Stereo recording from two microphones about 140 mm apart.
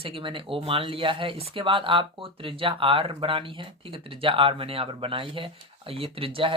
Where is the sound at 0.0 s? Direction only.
40° right (ahead or behind).